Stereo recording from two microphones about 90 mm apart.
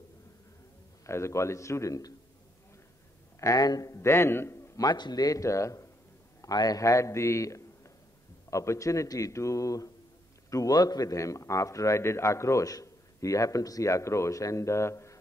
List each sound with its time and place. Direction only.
1.0 s a man's voice: 30° left (ahead or behind)
3.3 s a man's voice: 40° left (ahead or behind)
4.7 s a man's voice: 50° left (ahead or behind); by 5.9 s 35° left (ahead or behind)
6.4 s a man's voice: 45° left (ahead or behind)